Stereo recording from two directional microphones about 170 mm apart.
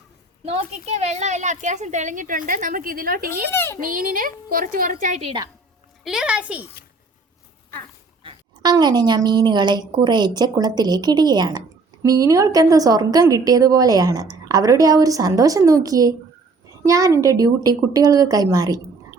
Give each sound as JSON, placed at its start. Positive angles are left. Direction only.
{"t": 0.4, "sound": "a woman's voice", "side_deg": -35}
{"t": 3.5, "sound": "a child's voice", "side_deg": 15}
{"t": 3.8, "sound": "a woman's voice", "side_deg": -55}
{"t": 6.1, "sound": "speech", "side_deg": -5}
{"t": 8.2, "sound": "a sound", "side_deg": -30}
{"t": 8.7, "sound": "a woman's voice", "side_deg": -25}